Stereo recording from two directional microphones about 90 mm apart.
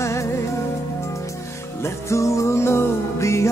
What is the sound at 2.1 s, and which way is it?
Music, 35° left (ahead or behind).